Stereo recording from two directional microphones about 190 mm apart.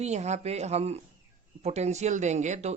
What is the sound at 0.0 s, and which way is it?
Speech, 35° right (ahead or behind).